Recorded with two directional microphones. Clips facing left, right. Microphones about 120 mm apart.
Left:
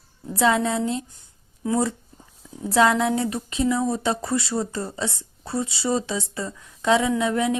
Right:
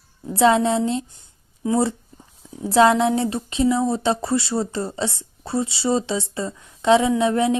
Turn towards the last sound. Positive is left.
turn(degrees=-30)  # may be behind; listen again after turning